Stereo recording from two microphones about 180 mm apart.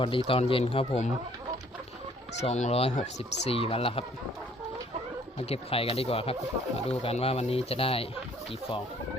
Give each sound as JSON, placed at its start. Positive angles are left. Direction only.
{"t": 0.0, "sound": "speech", "side_deg": 30}
{"t": 2.4, "sound": "speech", "side_deg": 40}
{"t": 5.4, "sound": "speech", "side_deg": 35}